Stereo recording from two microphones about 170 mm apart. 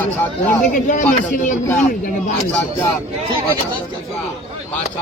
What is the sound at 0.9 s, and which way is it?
A man's voice, 50° left (ahead or behind).